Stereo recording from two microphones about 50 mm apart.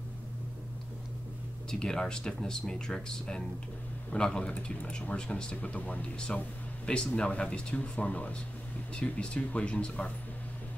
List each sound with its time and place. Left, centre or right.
1.7 s speech: centre
5.8 s speech: left
6.1 s speech: centre